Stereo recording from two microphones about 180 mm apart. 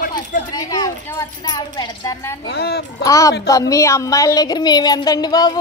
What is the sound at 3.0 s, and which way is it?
A child's voice, 20° left (ahead or behind).